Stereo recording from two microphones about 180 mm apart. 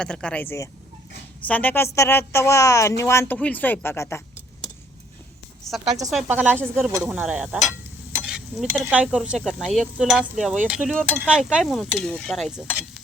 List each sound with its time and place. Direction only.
0.0 s a woman's voice: 5° left (ahead or behind)
5.7 s a woman's voice: centre (ahead or behind)
8.3 s a sound: centre (ahead or behind)
9.2 s stir: 5° right (ahead or behind)